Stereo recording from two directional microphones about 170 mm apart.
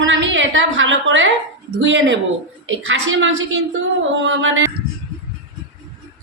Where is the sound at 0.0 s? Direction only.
90° right.